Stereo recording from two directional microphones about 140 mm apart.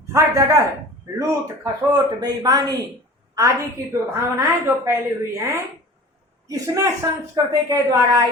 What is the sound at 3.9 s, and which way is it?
A woman's voice, 20° right (ahead or behind).